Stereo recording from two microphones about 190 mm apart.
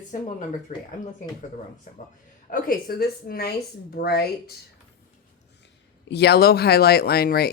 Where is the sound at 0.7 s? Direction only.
45° left (ahead or behind).